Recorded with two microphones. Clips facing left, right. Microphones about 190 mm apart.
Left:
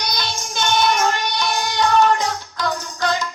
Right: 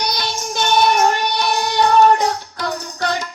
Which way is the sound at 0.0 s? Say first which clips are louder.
Right 3 dB; 60° right (ahead or behind).